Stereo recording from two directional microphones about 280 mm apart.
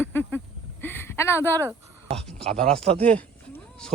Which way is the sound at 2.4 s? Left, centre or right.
Right.